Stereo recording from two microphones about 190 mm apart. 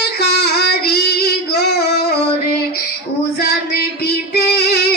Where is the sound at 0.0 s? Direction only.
60° left (ahead or behind).